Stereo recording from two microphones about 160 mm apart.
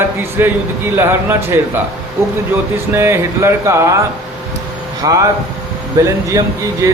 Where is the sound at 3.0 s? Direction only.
15° right (ahead or behind).